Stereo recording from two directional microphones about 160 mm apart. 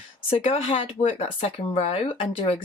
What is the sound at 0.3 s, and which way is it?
Speech, 35° left (ahead or behind).